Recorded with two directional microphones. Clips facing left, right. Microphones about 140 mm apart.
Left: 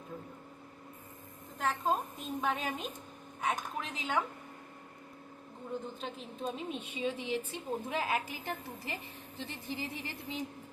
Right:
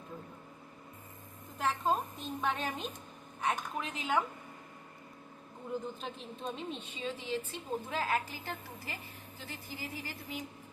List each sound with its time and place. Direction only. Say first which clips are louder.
1.5 s a woman's voice: even; centre (ahead or behind)
6.0 s a woman's voice: left 2 dB; centre (ahead or behind); by 10.3 s 25° left (ahead or behind)